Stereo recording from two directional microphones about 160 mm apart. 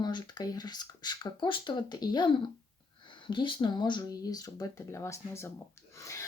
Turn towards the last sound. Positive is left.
turn(degrees=20)  # may be behind; listen again after turning